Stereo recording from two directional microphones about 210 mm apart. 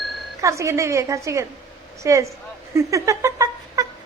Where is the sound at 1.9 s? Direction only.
15° right (ahead or behind).